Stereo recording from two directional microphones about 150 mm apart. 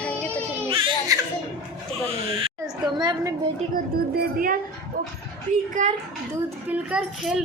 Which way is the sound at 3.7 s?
70° right (ahead or behind).